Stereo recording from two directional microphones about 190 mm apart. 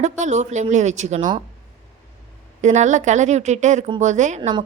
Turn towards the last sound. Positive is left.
turn(degrees=-40)  # may be behind; listen again after turning